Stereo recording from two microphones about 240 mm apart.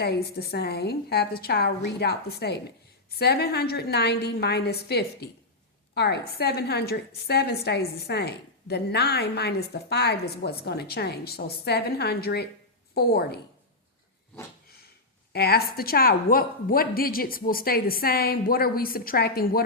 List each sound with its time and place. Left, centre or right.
0.0 s a woman's voice: left
15.3 s a woman's voice: left